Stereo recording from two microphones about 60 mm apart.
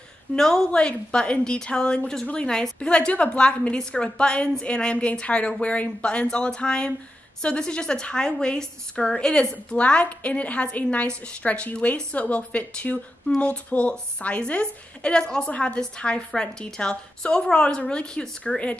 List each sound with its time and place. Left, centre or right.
0.4 s a woman's voice: centre